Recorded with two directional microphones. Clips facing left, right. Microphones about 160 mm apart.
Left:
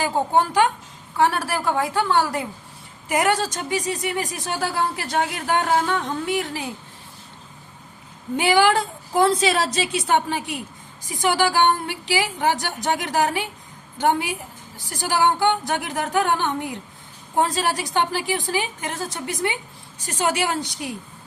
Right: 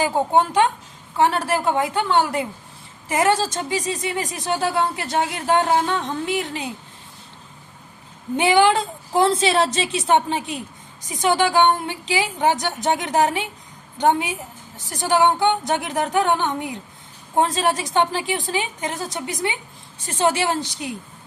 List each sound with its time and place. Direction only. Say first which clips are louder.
0.0 s a woman's voice: right 2 dB; 20° right (ahead or behind)
8.4 s a woman's voice: right 1 dB; 20° right (ahead or behind)